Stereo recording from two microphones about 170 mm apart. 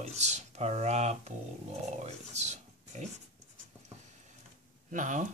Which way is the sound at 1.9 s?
45° right (ahead or behind).